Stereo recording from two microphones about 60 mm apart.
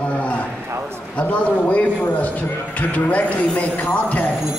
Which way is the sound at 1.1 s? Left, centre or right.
Left.